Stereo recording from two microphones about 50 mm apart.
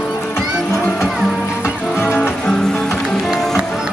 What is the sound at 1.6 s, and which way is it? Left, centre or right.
Music, left.